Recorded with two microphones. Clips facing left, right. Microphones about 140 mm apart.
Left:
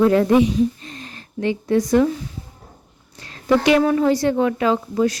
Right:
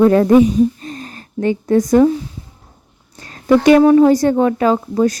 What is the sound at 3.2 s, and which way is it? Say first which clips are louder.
A woman's voice: right 5 dB; 40° right (ahead or behind).